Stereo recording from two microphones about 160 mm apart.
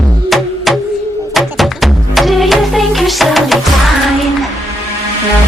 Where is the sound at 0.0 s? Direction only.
Centre (ahead or behind).